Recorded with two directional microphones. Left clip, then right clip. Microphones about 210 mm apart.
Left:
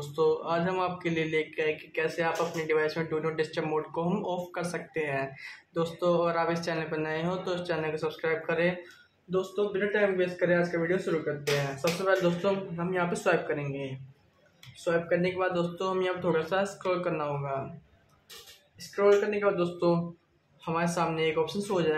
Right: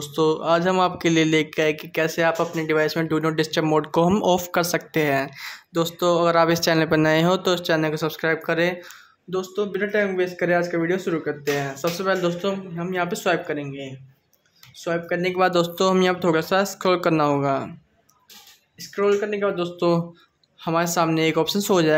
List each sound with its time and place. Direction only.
0.0 s speech: 50° right (ahead or behind)
18.9 s speech: 35° right (ahead or behind)
20.6 s speech: 50° right (ahead or behind)